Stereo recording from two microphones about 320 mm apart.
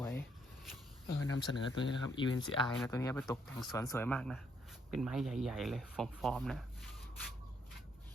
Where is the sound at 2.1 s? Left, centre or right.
Centre.